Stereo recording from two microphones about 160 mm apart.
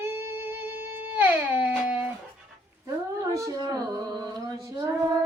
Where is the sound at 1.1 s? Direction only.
10° right (ahead or behind).